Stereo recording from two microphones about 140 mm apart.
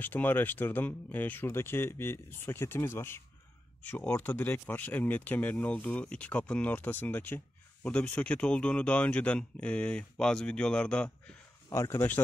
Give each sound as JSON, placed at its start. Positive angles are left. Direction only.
{"t": 0.0, "sound": "speech", "side_deg": 15}
{"t": 11.7, "sound": "speech", "side_deg": 20}